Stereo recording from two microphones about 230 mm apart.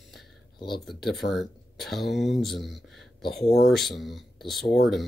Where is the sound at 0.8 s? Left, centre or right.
Centre.